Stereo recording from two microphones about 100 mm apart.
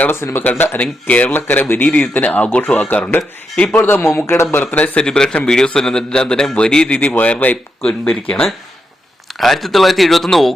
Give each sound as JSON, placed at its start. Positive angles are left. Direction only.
{"t": 0.0, "sound": "a man's voice", "side_deg": 25}
{"t": 3.8, "sound": "speech", "side_deg": 25}
{"t": 5.0, "sound": "a man's voice", "side_deg": 5}